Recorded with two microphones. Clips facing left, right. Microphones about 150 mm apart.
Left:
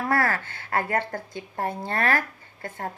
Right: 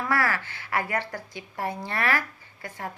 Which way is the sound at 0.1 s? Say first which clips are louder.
Left 2 dB; 50° left (ahead or behind).